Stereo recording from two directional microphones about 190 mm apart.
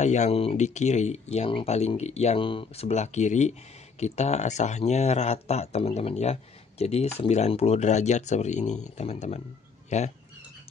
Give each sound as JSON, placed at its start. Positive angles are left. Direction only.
{"t": 0.0, "sound": "speech", "side_deg": 35}